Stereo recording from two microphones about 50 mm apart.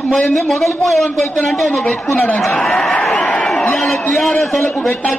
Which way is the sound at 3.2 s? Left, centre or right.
Left.